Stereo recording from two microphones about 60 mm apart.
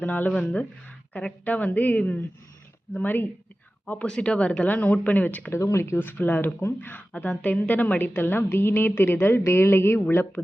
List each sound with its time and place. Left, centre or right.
0.0 s a woman's voice: left
3.8 s speech: centre
5.6 s a woman's voice: left